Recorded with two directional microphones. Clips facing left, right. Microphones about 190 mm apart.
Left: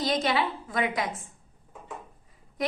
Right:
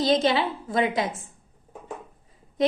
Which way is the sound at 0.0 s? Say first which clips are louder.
Right 5 dB; 25° right (ahead or behind).